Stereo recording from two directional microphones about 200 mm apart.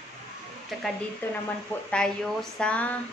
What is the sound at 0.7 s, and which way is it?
A woman's voice, centre (ahead or behind).